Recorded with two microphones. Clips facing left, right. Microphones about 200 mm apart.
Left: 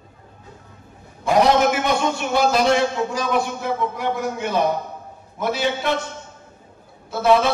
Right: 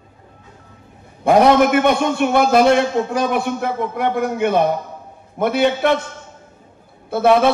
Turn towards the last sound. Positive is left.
turn(degrees=-55)  # may be behind; listen again after turning